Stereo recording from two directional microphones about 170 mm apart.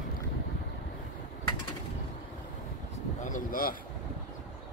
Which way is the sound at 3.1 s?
50° left (ahead or behind).